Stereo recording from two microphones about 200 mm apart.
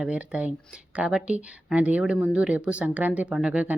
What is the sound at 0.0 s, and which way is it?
Speech, 5° right (ahead or behind).